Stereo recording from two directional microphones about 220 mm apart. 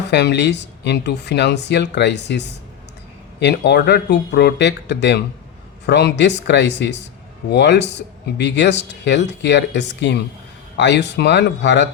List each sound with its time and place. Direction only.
0.1 s speech: 50° left (ahead or behind)